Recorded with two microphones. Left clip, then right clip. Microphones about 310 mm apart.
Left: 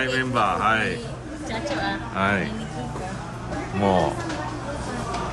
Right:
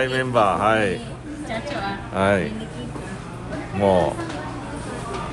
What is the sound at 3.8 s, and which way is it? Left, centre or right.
Speech, centre.